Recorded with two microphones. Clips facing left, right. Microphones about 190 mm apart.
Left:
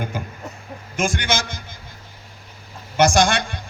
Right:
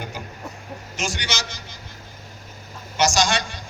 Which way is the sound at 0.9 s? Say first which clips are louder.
Left 7 dB; 50° left (ahead or behind).